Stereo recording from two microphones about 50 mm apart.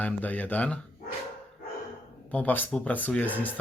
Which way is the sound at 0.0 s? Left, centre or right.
Left.